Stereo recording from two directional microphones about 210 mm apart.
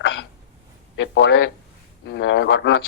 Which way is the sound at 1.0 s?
55° left (ahead or behind).